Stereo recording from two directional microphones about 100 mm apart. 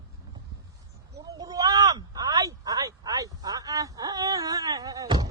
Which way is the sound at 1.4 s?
40° right (ahead or behind).